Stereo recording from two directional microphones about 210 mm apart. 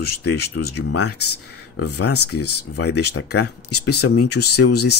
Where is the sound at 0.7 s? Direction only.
90° left.